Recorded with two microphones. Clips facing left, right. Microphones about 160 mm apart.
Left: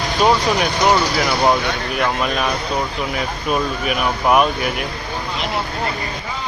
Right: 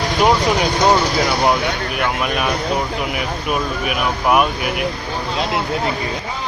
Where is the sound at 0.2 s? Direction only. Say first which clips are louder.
Even; 20° right (ahead or behind).